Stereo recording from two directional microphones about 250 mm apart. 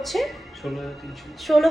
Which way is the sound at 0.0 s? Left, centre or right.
Centre.